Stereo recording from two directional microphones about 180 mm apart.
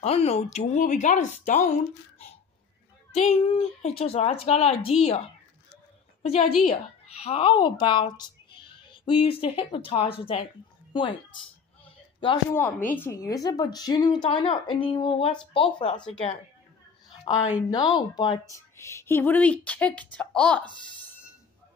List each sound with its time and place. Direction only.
0.0 s speech: 35° left (ahead or behind)
3.1 s speech: 35° left (ahead or behind)
6.2 s a woman's voice: 35° left (ahead or behind)
11.8 s a sound: 30° left (ahead or behind)
12.9 s a woman's voice: 15° left (ahead or behind); by 16.3 s 40° left (ahead or behind)
17.6 s a woman's voice: 25° left (ahead or behind); by 20.6 s 5° left (ahead or behind)